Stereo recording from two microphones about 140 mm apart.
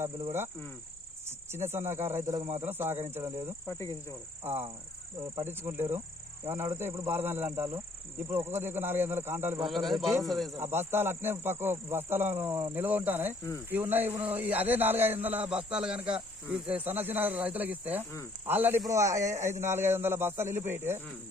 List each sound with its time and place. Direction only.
1.5 s speech: 15° right (ahead or behind)
3.7 s speech: 20° left (ahead or behind)
4.4 s speech: 15° right (ahead or behind)
9.6 s speech: centre (ahead or behind)
10.6 s speech: 15° right (ahead or behind)